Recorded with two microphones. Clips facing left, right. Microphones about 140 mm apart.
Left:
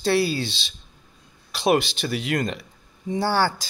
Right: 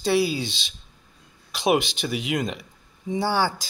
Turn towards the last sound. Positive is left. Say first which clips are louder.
# left 1 dB
turn(degrees=-15)  # may be behind; listen again after turning